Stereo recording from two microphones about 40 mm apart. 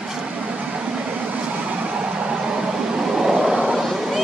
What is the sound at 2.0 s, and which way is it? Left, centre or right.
Vehicle, right.